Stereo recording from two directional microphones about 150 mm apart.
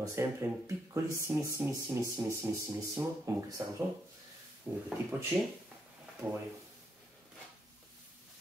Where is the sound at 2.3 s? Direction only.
20° right (ahead or behind).